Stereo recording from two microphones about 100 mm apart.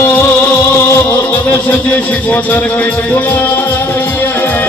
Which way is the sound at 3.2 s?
15° left (ahead or behind).